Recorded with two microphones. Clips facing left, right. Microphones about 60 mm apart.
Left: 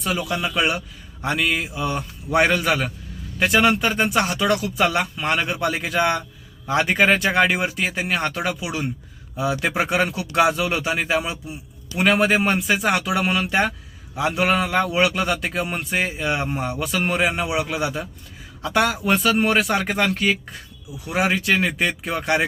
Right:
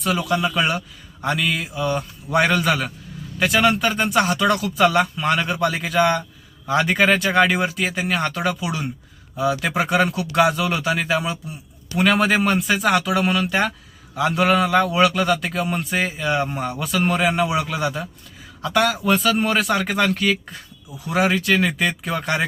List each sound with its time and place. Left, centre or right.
0.0 s speech: centre
1.3 s a man's voice: left
5.8 s a man's voice: left
17.3 s speech: centre
17.7 s a man's voice: left